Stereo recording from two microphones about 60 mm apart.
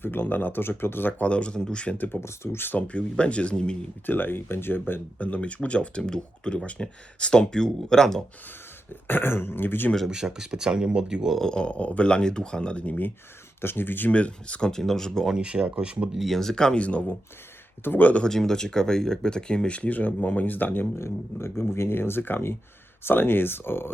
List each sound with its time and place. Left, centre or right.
0.0 s speech: left
1.2 s speech: centre
2.2 s speech: left
2.7 s speech: left
4.0 s speech: left
5.1 s speech: left; by 8.2 s centre
8.9 s speech: left
10.1 s speech: centre
11.3 s speech: centre; by 14.1 s left
14.1 s speech: left
15.3 s speech: centre
16.2 s speech: centre; by 18.2 s left
18.2 s speech: centre; by 20.8 s left
21.0 s speech: left